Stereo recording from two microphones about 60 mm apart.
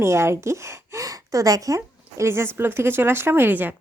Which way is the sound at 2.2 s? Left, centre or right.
Right.